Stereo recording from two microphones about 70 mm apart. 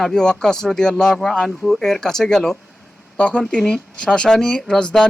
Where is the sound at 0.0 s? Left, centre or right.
Centre.